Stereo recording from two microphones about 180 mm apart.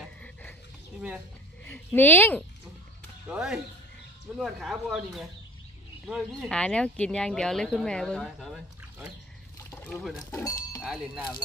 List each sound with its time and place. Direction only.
0.2 s a sound: 5° left (ahead or behind)
1.7 s speech: 10° left (ahead or behind)
3.3 s speech: 5° right (ahead or behind)
6.5 s speech: 5° left (ahead or behind)
9.7 s a sound: 10° left (ahead or behind)
10.3 s speech: 20° left (ahead or behind)
10.8 s speech: 5° right (ahead or behind)